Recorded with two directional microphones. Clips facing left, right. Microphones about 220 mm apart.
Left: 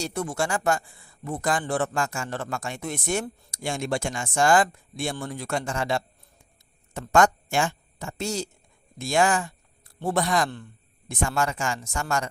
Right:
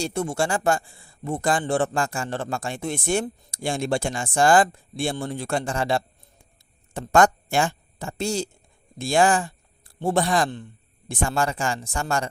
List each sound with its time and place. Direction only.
0.0 s a woman's voice: 25° right (ahead or behind)